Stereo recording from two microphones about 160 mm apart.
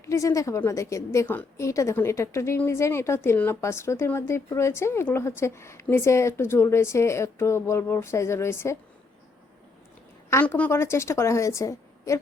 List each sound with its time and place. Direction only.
0.0 s a woman's voice: 20° left (ahead or behind)
10.2 s a woman's voice: 15° left (ahead or behind)